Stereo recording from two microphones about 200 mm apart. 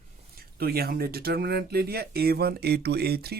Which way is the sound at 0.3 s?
50° right (ahead or behind).